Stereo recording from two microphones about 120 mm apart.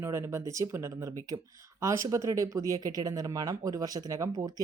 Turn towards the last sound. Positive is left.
turn(degrees=-30)  # may be behind; listen again after turning